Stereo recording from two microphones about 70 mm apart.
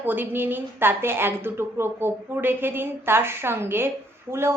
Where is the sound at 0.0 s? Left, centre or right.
Right.